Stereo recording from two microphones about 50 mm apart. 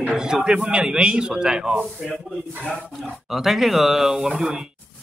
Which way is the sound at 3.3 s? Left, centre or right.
Centre.